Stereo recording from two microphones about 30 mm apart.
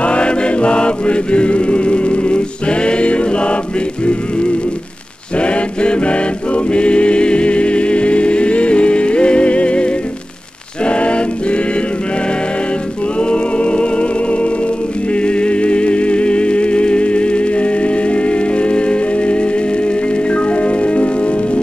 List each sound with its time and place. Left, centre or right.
0.0 s music: left
5.4 s chant: left
10.9 s a sound: left
13.2 s music: left